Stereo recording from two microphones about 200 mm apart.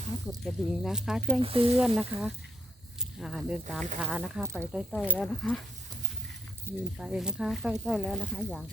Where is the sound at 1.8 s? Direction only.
5° right (ahead or behind).